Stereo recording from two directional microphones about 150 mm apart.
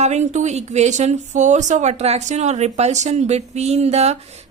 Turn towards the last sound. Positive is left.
turn(degrees=-45)  # may be behind; listen again after turning